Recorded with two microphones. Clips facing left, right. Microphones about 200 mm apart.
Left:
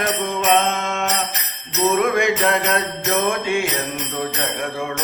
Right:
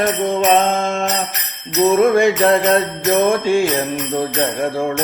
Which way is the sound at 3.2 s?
35° right (ahead or behind).